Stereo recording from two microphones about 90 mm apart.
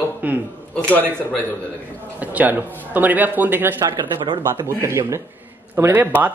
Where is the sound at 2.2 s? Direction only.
20° right (ahead or behind).